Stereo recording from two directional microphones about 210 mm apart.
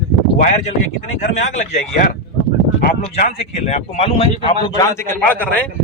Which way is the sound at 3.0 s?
35° left (ahead or behind).